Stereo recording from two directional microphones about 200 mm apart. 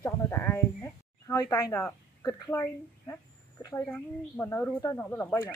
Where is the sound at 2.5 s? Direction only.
15° left (ahead or behind).